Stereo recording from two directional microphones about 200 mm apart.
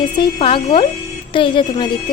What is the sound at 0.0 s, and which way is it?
A woman's voice, 25° left (ahead or behind).